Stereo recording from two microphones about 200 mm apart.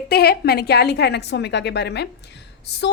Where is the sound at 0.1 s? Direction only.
50° left (ahead or behind).